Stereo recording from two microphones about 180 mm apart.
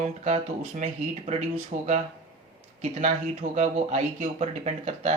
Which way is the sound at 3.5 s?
40° right (ahead or behind).